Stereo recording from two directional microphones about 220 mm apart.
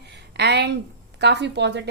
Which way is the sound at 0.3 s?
50° right (ahead or behind).